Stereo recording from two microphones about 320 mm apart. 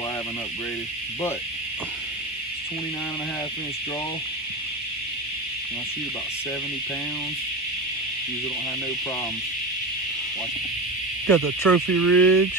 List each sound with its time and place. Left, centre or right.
11.2 s speech: centre